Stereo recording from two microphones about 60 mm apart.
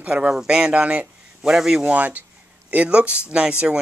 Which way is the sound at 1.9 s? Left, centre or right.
Right.